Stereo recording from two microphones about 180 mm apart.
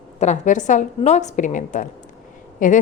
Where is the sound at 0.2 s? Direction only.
40° left (ahead or behind).